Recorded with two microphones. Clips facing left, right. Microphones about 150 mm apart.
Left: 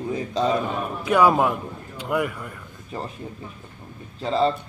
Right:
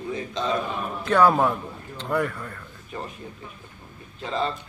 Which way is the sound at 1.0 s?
10° left (ahead or behind).